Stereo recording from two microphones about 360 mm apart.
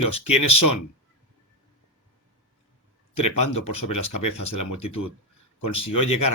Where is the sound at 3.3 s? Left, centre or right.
Left.